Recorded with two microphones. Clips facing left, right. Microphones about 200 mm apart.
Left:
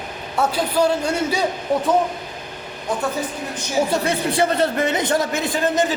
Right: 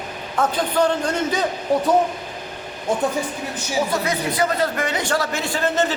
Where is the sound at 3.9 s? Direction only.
30° left (ahead or behind).